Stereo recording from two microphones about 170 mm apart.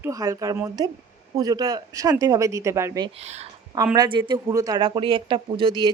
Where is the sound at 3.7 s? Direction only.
25° right (ahead or behind).